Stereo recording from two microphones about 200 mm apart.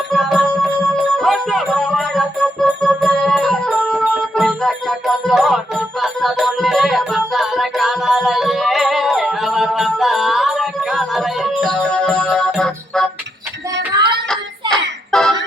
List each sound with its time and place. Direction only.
0.1 s music: centre (ahead or behind)
13.9 s hands: 25° right (ahead or behind)
14.7 s music: 5° left (ahead or behind)